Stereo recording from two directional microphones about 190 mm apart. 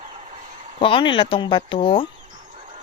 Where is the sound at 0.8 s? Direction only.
25° left (ahead or behind).